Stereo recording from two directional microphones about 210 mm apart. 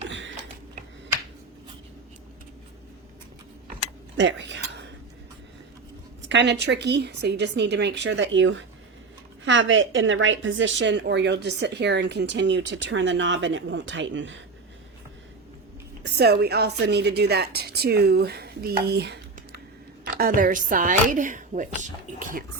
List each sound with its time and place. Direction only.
0.0 s a sound: 60° right (ahead or behind)
4.2 s speech: 60° right (ahead or behind)
6.2 s a woman's voice: 55° right (ahead or behind)
16.0 s a woman's voice: 50° right (ahead or behind)